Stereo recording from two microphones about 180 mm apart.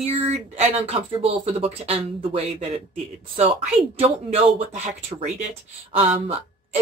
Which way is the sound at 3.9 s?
35° right (ahead or behind).